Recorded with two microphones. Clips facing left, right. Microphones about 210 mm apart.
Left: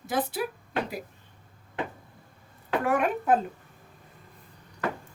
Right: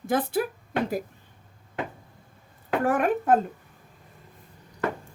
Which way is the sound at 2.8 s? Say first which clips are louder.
Right 3 dB; 50° right (ahead or behind).